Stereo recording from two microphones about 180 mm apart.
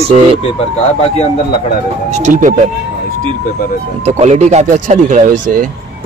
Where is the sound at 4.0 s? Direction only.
35° right (ahead or behind).